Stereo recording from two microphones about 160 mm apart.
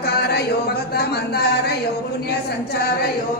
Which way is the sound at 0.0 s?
80° left.